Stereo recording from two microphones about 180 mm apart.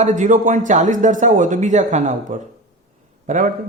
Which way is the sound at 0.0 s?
45° right (ahead or behind).